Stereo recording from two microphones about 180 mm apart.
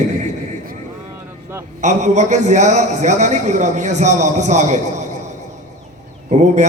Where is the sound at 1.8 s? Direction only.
40° right (ahead or behind).